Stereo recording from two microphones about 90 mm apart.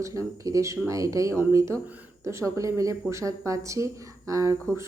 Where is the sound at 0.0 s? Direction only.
35° right (ahead or behind).